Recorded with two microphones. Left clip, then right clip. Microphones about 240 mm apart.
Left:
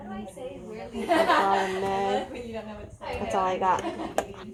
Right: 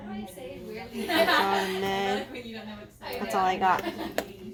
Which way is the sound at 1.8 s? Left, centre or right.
Right.